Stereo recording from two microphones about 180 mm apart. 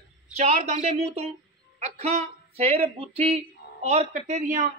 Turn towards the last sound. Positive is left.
turn(degrees=-40)  # may be behind; listen again after turning